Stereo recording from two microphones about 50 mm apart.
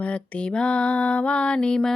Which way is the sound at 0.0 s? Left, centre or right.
Left.